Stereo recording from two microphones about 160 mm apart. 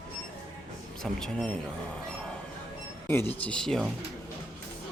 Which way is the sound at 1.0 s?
5° left (ahead or behind).